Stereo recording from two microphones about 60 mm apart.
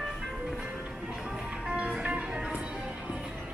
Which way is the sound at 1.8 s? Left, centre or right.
Centre.